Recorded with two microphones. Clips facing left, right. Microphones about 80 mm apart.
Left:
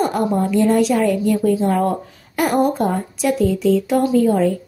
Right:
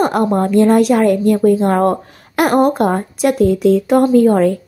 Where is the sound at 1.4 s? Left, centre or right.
Right.